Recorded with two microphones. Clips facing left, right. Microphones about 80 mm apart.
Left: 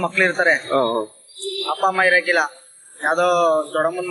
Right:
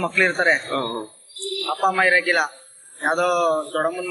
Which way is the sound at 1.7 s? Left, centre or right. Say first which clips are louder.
Left 1 dB; centre.